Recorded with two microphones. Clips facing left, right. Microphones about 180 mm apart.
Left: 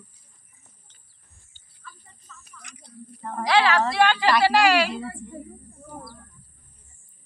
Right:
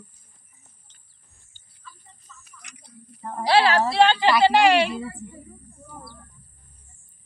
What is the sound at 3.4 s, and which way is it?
A woman's voice, 30° right (ahead or behind).